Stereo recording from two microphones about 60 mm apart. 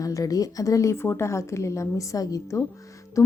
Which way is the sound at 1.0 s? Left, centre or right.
Left.